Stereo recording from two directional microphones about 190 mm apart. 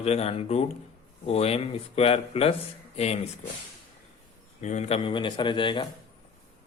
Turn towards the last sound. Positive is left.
turn(degrees=25)  # may be behind; listen again after turning